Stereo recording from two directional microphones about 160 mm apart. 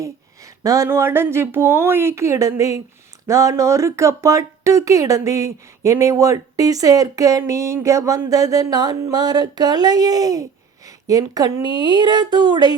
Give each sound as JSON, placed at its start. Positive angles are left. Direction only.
{"t": 0.0, "sound": "speech", "side_deg": -20}